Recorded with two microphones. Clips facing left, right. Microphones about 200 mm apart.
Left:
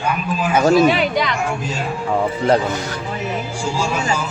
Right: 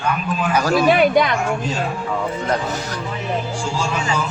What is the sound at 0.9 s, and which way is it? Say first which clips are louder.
Speech: right 4 dB; 55° right (ahead or behind).